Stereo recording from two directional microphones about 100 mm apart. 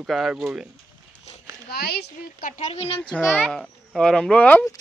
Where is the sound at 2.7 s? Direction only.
75° left (ahead or behind).